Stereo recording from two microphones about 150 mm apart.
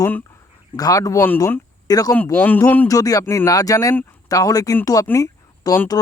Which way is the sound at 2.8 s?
25° left (ahead or behind).